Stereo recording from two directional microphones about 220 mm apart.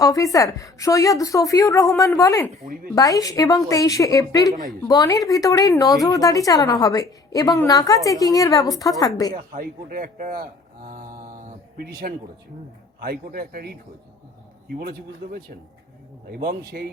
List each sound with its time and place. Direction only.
0.0 s speech: 15° left (ahead or behind)
9.3 s speech: 40° right (ahead or behind)
14.8 s speech: 45° right (ahead or behind)